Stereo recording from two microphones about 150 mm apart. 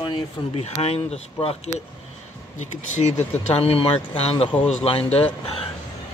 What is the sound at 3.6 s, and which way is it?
Speech, 40° left (ahead or behind).